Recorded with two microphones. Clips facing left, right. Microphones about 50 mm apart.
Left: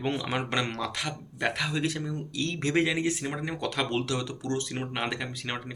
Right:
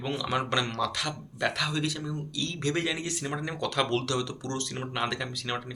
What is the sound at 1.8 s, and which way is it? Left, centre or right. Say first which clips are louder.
Speech: left 2 dB; left.